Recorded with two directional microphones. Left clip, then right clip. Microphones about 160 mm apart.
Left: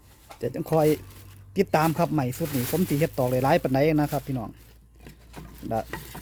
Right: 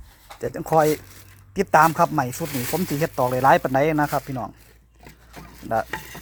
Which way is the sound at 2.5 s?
Centre (ahead or behind).